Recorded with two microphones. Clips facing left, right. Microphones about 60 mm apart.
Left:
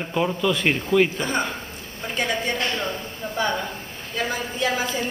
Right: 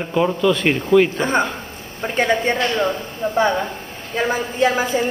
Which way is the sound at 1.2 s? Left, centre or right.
Right.